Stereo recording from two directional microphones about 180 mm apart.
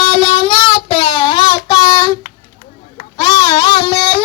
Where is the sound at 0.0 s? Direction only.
30° left (ahead or behind).